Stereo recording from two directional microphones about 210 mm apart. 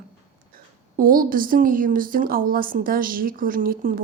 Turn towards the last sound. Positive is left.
turn(degrees=-40)  # may be behind; listen again after turning